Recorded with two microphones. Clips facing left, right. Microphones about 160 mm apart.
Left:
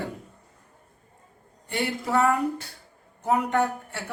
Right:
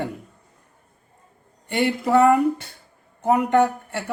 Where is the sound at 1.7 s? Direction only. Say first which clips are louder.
Right 7 dB; 65° right (ahead or behind).